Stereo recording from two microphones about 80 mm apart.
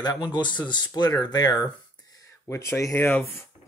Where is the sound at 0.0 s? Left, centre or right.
Left.